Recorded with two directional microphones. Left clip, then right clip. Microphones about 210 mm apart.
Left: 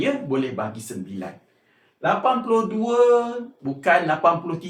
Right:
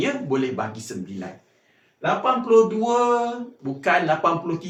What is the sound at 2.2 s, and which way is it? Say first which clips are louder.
Speech: right 7 dB; 5° right (ahead or behind).